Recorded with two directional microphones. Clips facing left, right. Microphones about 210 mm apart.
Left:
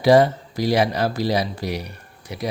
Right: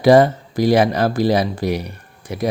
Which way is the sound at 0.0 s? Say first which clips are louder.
Right 3 dB; 50° right (ahead or behind).